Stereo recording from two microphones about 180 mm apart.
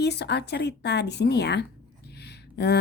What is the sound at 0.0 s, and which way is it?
Speech, 70° left (ahead or behind).